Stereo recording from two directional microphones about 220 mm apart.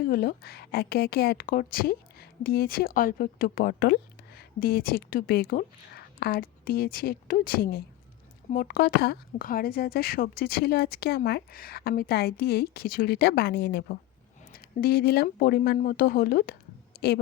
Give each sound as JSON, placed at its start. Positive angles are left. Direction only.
{"t": 0.1, "sound": "a woman's voice", "side_deg": 40}